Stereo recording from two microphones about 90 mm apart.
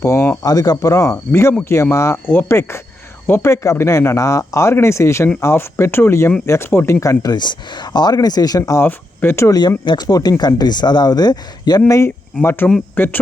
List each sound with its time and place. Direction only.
0.0 s speech: 35° left (ahead or behind)
7.0 s speech: 40° left (ahead or behind)
8.8 s speech: 25° left (ahead or behind)
9.6 s speech: 55° left (ahead or behind)
11.9 s speech: 35° left (ahead or behind)
12.4 s speech: 25° left (ahead or behind)